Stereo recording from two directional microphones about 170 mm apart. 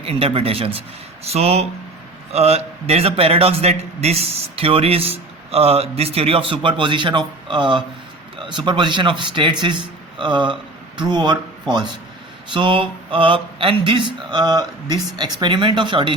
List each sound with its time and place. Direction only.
0.0 s a man's voice: 35° right (ahead or behind)
12.5 s speech: 30° right (ahead or behind)